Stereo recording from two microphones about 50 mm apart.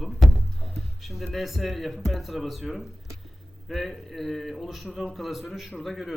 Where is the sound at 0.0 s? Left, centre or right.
Centre.